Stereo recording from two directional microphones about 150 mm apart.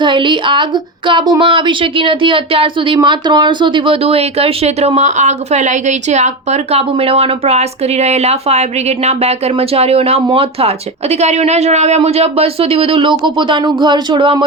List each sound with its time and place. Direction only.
0.0 s speech: 35° right (ahead or behind)